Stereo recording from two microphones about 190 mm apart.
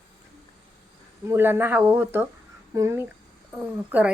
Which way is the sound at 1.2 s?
10° right (ahead or behind).